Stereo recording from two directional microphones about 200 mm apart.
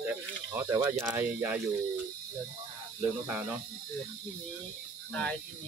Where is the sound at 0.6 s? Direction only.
15° right (ahead or behind).